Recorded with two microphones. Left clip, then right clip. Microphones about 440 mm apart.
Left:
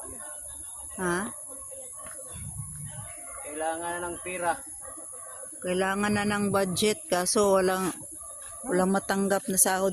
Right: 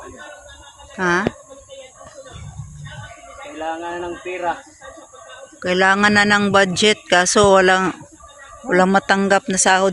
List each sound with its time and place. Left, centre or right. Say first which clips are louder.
0.9 s speech: right 12 dB; left
3.6 s speech: right 5 dB; left
5.6 s a man's voice: right 13 dB; left